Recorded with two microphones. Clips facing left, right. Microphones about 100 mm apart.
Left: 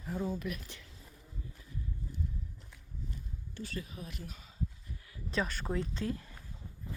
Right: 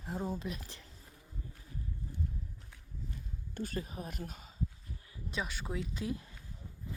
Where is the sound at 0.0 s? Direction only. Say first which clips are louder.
Left 2 dB; 35° right (ahead or behind).